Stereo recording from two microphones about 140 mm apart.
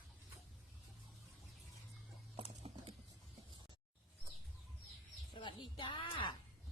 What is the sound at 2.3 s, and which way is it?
Clip-clop, 45° right (ahead or behind).